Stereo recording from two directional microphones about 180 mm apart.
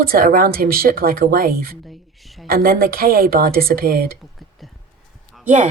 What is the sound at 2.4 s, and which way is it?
Speech, 55° right (ahead or behind).